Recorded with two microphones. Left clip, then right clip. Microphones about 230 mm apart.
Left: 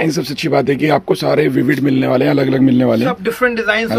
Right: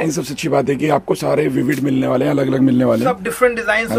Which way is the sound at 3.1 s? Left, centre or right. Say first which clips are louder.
Even; centre.